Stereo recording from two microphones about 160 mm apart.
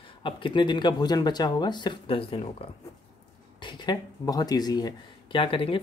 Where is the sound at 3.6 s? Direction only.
30° left (ahead or behind).